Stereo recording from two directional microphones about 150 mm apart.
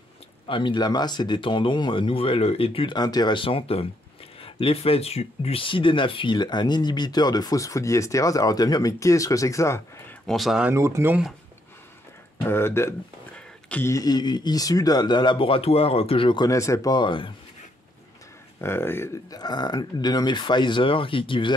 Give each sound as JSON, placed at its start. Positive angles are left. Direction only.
{"t": 0.5, "sound": "speech", "side_deg": 35}
{"t": 10.2, "sound": "speech", "side_deg": 0}
{"t": 10.7, "sound": "speech", "side_deg": -20}
{"t": 12.4, "sound": "speech", "side_deg": 15}
{"t": 16.4, "sound": "speech", "side_deg": 20}
{"t": 18.6, "sound": "speech", "side_deg": 15}